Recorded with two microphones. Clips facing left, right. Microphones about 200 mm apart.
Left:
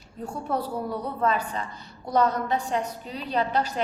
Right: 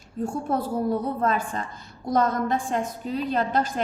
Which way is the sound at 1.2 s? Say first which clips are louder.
Right 1 dB; 45° right (ahead or behind).